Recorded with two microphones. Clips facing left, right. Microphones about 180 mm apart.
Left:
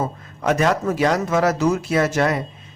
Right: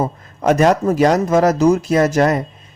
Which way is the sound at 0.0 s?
40° right (ahead or behind).